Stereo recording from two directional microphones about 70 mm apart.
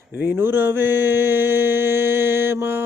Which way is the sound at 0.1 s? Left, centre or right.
Right.